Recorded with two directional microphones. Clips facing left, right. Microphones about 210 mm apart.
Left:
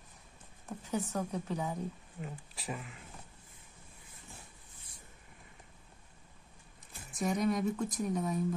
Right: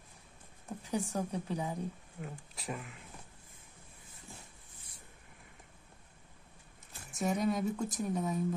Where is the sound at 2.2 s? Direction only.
Centre (ahead or behind).